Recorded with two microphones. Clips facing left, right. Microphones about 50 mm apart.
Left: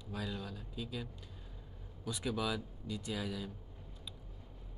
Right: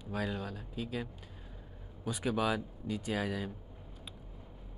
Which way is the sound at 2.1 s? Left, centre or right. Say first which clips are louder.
Right 5 dB; right.